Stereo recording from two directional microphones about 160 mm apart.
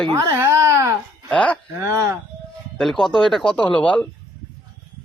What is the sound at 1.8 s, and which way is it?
Speech, 20° right (ahead or behind).